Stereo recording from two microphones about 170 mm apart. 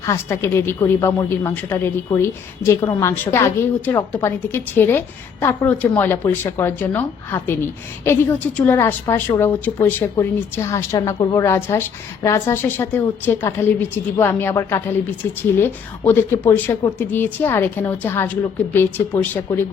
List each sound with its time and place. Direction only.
0.0 s a woman's voice: 15° left (ahead or behind)